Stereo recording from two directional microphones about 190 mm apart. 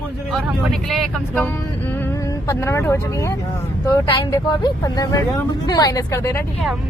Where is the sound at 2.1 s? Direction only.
15° left (ahead or behind).